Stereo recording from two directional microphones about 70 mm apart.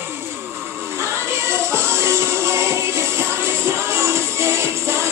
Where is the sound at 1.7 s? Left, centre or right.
Right.